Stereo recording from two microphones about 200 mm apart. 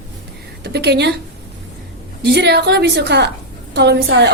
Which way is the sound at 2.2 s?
55° right (ahead or behind).